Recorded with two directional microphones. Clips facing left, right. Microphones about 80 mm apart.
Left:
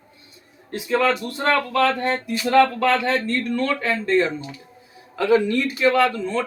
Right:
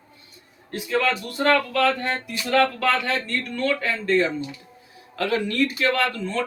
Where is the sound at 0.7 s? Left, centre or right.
Left.